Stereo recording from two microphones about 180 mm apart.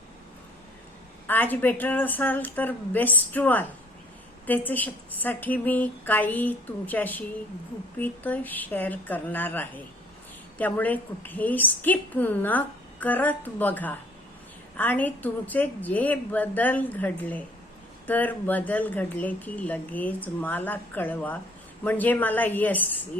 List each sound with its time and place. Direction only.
1.3 s a woman's voice: 10° left (ahead or behind)